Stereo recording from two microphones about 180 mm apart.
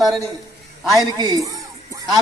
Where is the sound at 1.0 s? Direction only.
20° right (ahead or behind).